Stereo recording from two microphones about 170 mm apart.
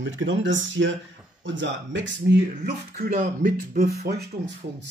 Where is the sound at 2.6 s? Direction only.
55° right (ahead or behind).